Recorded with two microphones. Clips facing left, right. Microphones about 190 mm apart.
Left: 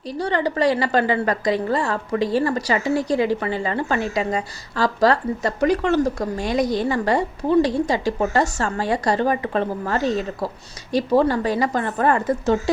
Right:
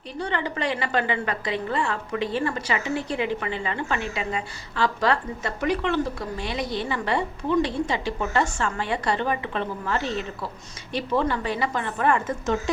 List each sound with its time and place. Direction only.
0.1 s a woman's voice: 40° left (ahead or behind)